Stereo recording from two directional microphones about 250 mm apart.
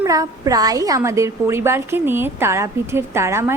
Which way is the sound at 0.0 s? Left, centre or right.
Centre.